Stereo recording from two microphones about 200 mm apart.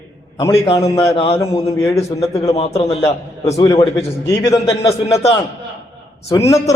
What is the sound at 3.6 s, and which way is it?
Speech, 20° left (ahead or behind).